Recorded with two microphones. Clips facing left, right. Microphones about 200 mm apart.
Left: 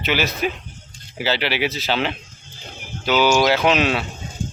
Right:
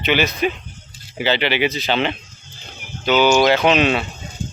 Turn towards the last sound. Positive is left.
turn(degrees=50)  # may be behind; listen again after turning